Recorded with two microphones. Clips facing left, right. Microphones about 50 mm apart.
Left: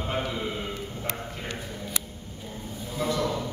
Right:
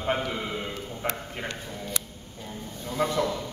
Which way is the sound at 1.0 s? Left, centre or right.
Right.